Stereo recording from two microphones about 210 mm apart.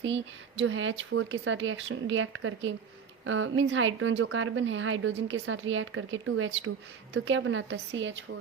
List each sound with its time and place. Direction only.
0.0 s a woman's voice: 60° right (ahead or behind)